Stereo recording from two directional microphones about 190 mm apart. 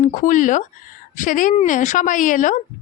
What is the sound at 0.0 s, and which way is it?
Speech, 45° left (ahead or behind).